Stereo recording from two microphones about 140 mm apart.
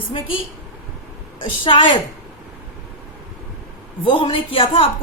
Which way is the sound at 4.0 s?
35° left (ahead or behind).